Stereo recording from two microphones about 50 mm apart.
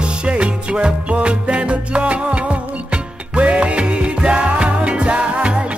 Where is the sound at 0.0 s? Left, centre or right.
Right.